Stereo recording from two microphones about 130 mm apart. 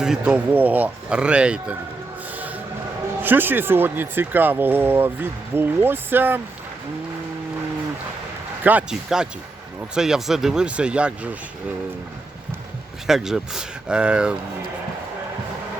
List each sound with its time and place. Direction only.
0.0 s speech: 5° right (ahead or behind)
3.2 s speech: 15° right (ahead or behind)
8.6 s speech: 10° right (ahead or behind)
13.1 s speech: 5° right (ahead or behind)